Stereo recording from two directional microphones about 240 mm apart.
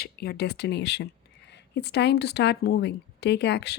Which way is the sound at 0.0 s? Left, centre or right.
Left.